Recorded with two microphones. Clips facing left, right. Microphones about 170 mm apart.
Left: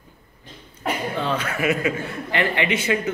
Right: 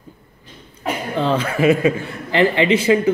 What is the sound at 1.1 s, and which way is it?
A man's voice, 30° right (ahead or behind).